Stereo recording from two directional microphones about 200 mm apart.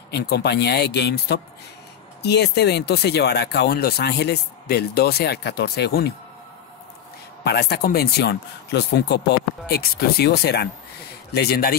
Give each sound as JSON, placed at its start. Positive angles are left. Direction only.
{"t": 0.1, "sound": "speech", "side_deg": 55}
{"t": 7.4, "sound": "speech", "side_deg": 55}